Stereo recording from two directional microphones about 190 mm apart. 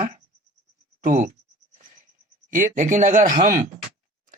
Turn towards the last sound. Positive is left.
turn(degrees=-40)  # may be behind; listen again after turning